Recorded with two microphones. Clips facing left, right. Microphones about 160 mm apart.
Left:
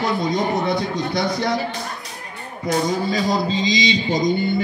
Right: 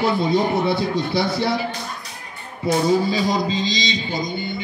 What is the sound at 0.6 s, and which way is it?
Speech, 5° right (ahead or behind).